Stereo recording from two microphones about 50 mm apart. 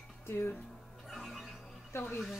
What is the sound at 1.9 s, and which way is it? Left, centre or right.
Speech, left.